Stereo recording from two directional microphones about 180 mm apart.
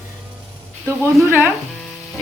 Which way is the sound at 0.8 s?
10° right (ahead or behind).